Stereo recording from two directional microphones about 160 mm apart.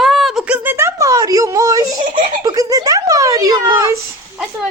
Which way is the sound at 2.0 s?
55° right (ahead or behind).